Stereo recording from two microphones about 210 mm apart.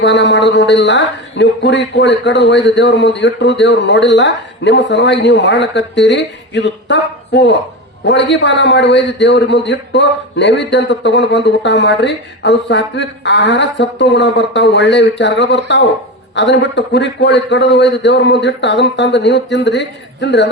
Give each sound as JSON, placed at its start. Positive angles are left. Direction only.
{"t": 0.0, "sound": "a man's voice", "side_deg": 55}